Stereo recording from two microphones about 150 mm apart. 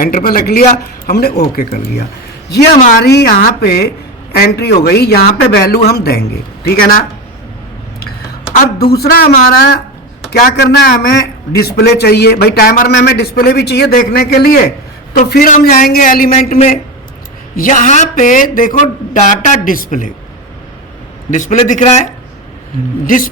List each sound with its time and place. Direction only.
0.0 s a man's voice: 75° left (ahead or behind)
3.2 s a man's voice: 75° left (ahead or behind)
8.8 s a man's voice: 90° left
15.1 s speech: 70° left (ahead or behind)
21.2 s speech: 55° left (ahead or behind)
23.0 s speech: 60° left (ahead or behind)